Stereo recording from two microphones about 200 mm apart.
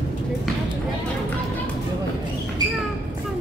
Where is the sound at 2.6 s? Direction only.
20° right (ahead or behind).